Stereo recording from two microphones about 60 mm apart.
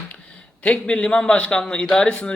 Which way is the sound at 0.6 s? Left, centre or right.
Centre.